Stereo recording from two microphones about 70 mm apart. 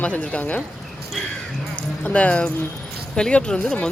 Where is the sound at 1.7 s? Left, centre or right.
Centre.